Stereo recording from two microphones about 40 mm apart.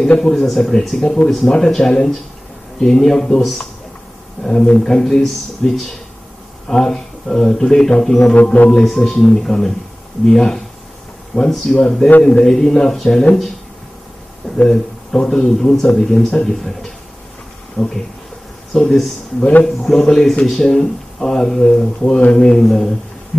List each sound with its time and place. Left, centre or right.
0.2 s speech: centre
14.4 s a sound: left
15.1 s speech: centre